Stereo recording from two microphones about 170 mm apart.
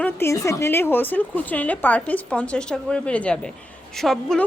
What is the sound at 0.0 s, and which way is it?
A woman's voice, 15° left (ahead or behind).